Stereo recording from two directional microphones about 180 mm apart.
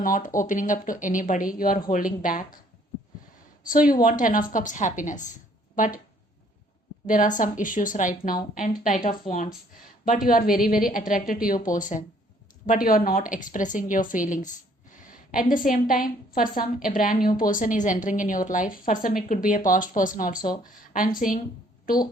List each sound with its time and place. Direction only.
0.0 s a woman's voice: 50° left (ahead or behind)
3.7 s a woman's voice: 50° left (ahead or behind)
7.1 s a woman's voice: 45° left (ahead or behind)